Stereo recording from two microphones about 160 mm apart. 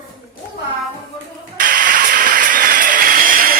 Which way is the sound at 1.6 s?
55° right (ahead or behind).